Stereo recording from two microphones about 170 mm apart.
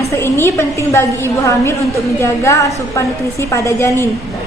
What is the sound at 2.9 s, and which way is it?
A woman's voice, 15° left (ahead or behind).